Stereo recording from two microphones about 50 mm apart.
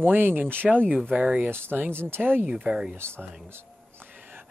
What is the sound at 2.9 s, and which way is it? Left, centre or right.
Speech, right.